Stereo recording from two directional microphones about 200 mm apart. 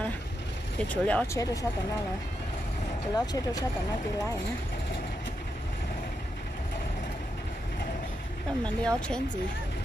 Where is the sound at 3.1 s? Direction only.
20° left (ahead or behind).